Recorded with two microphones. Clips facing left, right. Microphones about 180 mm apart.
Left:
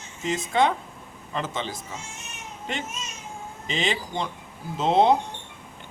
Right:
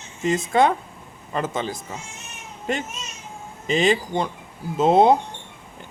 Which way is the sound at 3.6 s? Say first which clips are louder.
Right 8 dB; 45° right (ahead or behind).